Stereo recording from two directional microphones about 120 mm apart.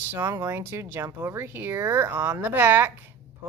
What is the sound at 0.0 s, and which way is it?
Speech, 15° right (ahead or behind).